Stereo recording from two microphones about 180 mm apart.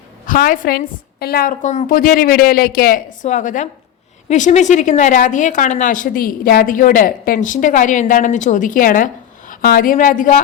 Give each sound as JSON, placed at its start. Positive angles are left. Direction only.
{"t": 0.3, "sound": "a woman's voice", "side_deg": 50}